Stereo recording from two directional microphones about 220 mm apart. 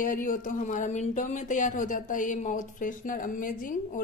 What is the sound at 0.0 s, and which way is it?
Speech, 35° left (ahead or behind).